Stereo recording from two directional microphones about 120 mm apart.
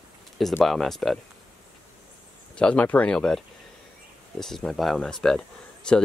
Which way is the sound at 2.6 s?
10° left (ahead or behind).